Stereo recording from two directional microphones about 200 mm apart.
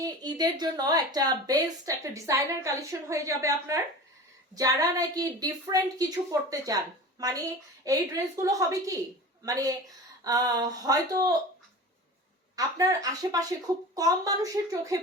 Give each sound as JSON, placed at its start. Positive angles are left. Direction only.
{"t": 0.0, "sound": "a woman's voice", "side_deg": -20}
{"t": 12.5, "sound": "a woman's voice", "side_deg": -15}